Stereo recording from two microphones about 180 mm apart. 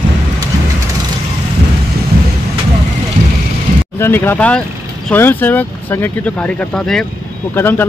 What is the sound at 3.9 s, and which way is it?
Speech, 15° left (ahead or behind).